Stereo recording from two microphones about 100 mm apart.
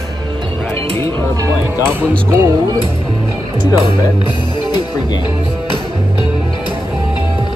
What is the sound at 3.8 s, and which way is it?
Speech, 55° left (ahead or behind).